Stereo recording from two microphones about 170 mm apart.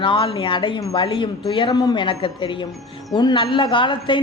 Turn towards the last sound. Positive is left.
turn(degrees=30)  # may be behind; listen again after turning